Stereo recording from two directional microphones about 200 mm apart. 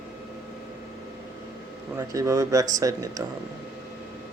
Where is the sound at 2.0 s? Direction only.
15° right (ahead or behind).